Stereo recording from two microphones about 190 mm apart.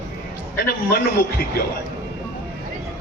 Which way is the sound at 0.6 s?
55° left (ahead or behind).